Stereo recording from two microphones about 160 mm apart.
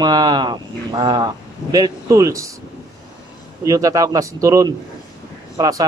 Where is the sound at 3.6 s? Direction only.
20° right (ahead or behind).